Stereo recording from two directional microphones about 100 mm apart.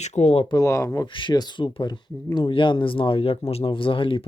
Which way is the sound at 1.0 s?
55° left (ahead or behind).